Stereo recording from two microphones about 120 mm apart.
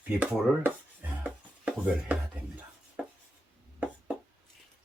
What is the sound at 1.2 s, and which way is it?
Music, 10° right (ahead or behind).